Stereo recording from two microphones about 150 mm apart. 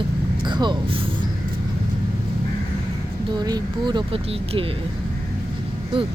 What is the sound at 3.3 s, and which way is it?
Speech, 25° right (ahead or behind).